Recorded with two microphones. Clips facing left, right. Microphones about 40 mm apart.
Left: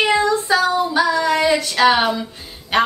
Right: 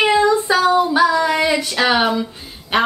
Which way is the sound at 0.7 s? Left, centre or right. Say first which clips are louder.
Right 3 dB; centre.